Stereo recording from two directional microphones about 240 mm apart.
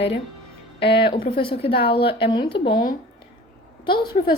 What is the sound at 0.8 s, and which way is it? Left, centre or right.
Speech, left.